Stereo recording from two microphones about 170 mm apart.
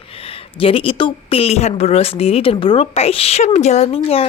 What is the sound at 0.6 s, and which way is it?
A woman's voice, 35° left (ahead or behind).